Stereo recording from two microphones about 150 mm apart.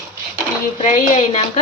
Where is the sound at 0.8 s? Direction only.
50° left (ahead or behind).